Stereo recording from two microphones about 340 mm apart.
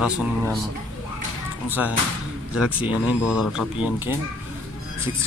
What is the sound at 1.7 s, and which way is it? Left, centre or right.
Speech, centre.